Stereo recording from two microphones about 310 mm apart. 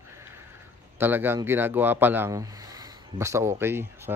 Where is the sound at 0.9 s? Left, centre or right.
Centre.